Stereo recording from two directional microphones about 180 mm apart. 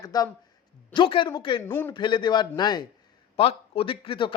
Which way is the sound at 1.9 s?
25° left (ahead or behind).